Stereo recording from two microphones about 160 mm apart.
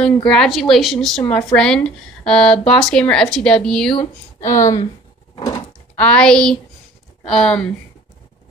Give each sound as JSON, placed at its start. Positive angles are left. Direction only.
{"t": 0.0, "sound": "speech", "side_deg": 5}
{"t": 4.0, "sound": "speech", "side_deg": 15}
{"t": 5.3, "sound": "a sound", "side_deg": 20}
{"t": 5.9, "sound": "speech", "side_deg": 5}